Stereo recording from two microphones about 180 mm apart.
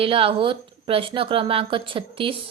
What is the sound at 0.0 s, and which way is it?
A woman's voice, 30° right (ahead or behind).